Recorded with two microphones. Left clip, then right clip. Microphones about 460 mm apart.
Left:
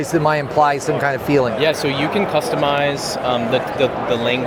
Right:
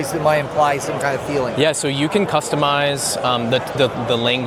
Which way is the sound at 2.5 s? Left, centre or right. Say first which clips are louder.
Even; right.